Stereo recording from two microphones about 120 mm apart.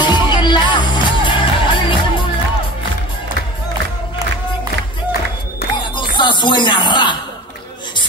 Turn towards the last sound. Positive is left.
turn(degrees=40)  # may be behind; listen again after turning